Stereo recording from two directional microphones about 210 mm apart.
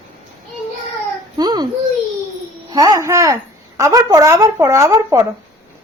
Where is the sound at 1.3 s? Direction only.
20° right (ahead or behind).